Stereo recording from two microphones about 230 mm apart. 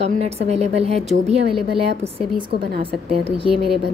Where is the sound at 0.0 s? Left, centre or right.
Right.